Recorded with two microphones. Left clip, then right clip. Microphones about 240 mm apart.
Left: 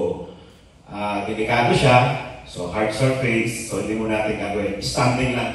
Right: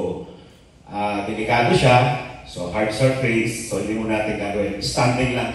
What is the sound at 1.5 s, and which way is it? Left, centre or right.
A man's voice, centre.